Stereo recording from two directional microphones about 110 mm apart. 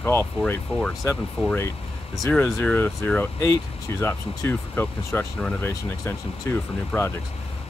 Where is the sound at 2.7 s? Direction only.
15° left (ahead or behind).